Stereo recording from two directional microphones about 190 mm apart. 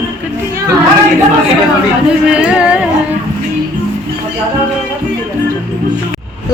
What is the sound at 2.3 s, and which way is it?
Speech, 5° right (ahead or behind).